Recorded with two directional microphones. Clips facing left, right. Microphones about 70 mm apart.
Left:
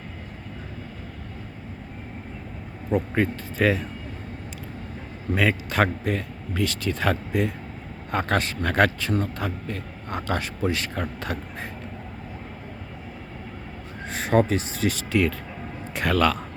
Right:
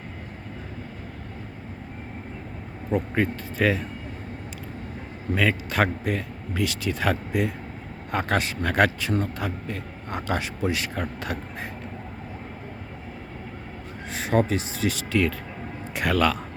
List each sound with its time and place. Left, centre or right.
2.9 s speech: centre
5.3 s a man's voice: centre
14.1 s speech: left
15.9 s a man's voice: centre